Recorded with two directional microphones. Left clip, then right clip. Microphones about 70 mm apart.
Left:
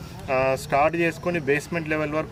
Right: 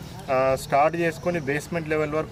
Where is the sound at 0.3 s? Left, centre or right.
Centre.